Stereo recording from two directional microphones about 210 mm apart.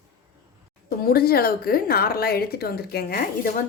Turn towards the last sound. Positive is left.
turn(degrees=45)  # may be behind; listen again after turning